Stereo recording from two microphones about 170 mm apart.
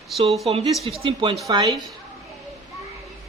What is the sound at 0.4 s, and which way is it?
A woman's voice, 35° right (ahead or behind).